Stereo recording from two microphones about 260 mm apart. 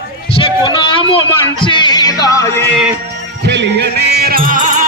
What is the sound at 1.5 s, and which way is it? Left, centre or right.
Music, centre.